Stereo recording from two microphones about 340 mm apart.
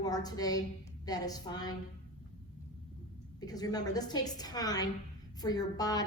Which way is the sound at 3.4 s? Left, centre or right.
Centre.